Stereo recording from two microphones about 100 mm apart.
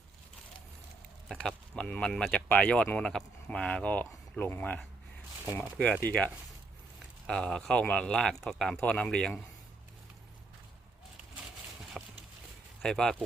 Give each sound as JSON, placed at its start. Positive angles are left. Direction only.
{"t": 1.3, "sound": "speech", "side_deg": 5}
{"t": 6.0, "sound": "speech", "side_deg": 15}
{"t": 12.0, "sound": "clip-clop", "side_deg": -5}
{"t": 12.8, "sound": "speech", "side_deg": 5}